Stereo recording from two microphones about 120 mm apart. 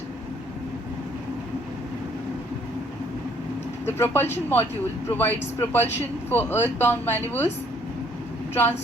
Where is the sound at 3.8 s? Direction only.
20° left (ahead or behind).